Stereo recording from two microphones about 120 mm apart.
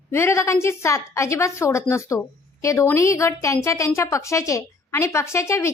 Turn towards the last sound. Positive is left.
turn(degrees=25)  # may be behind; listen again after turning